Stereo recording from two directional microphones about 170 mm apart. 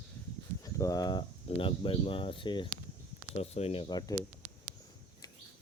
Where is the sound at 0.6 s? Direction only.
20° left (ahead or behind).